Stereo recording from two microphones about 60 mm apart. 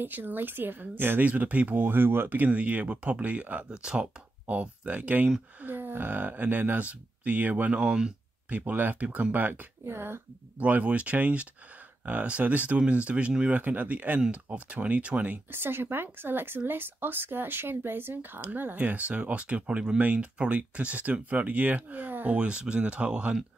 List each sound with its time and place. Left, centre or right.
0.0 s speech: right
1.3 s speech: right
1.8 s speech: right; by 4.1 s centre
4.5 s speech: right
5.6 s speech: right; by 8.1 s centre
8.5 s speech: right
10.6 s speech: right
15.5 s speech: right; by 23.3 s centre